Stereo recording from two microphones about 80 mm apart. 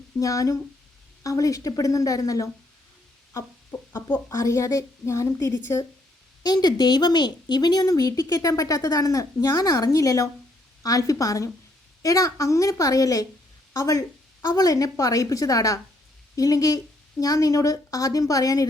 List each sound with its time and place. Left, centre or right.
0.2 s speech: left
3.7 s speech: centre
4.3 s speech: left
6.4 s speech: left